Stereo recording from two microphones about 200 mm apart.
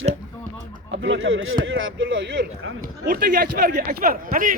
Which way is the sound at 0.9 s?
70° right (ahead or behind).